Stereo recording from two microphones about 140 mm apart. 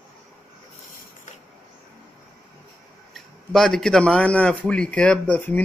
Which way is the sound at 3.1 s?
Centre (ahead or behind).